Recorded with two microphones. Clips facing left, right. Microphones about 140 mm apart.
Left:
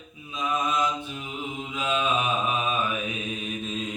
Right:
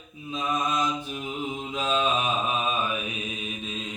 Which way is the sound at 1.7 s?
30° right (ahead or behind).